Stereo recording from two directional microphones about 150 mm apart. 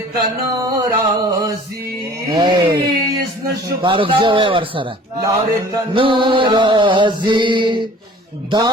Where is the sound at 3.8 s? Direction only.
35° right (ahead or behind).